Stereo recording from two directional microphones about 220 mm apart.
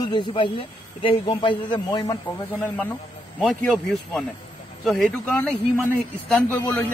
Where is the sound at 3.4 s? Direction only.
5° left (ahead or behind).